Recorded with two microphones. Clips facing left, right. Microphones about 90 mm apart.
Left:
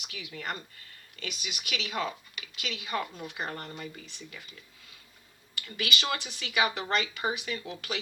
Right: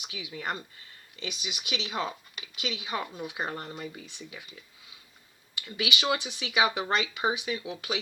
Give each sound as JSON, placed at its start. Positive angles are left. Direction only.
{"t": 0.0, "sound": "speech", "side_deg": -20}
{"t": 5.5, "sound": "speech", "side_deg": -20}